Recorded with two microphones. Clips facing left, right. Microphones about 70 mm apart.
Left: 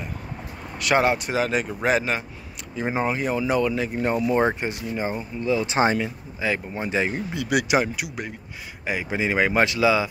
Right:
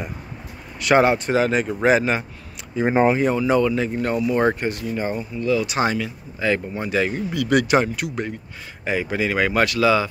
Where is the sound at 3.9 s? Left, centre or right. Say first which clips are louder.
Right 1 dB; left.